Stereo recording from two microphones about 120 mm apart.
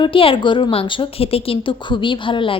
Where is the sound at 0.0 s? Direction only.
45° left (ahead or behind).